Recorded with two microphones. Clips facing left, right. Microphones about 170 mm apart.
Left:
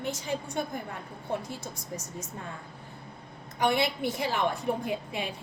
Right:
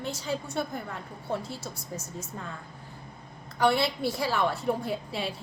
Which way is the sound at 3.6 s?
15° left (ahead or behind).